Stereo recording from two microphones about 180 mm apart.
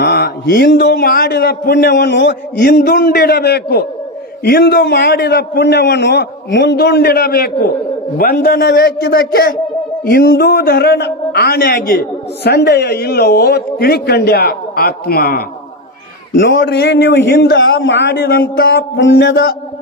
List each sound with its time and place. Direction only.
0.0 s mantra: 65° left (ahead or behind)
0.7 s a man's voice: 65° left (ahead or behind)
16.3 s speech: 90° left